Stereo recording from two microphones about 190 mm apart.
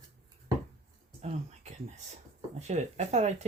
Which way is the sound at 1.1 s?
35° right (ahead or behind).